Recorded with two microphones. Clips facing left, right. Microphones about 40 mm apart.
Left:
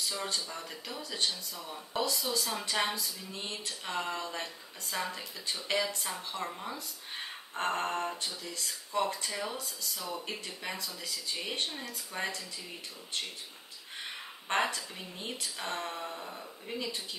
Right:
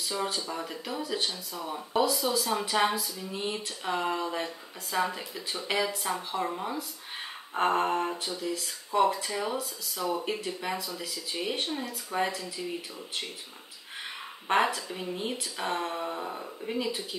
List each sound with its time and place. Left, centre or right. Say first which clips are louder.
0.0 s speech: right 4 dB; centre
1.5 s speech: right 7 dB; right
2.0 s speech: right 6 dB; centre
14.5 s speech: right 5 dB; centre
16.2 s speech: right 7 dB; right
16.6 s speech: right 6 dB; centre